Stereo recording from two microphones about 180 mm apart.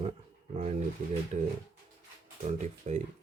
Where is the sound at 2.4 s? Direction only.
40° right (ahead or behind).